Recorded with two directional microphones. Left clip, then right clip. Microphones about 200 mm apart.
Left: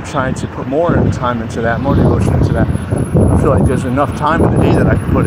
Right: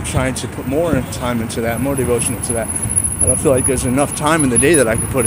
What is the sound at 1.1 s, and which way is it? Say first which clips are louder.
Speech: left 4 dB; 5° right (ahead or behind).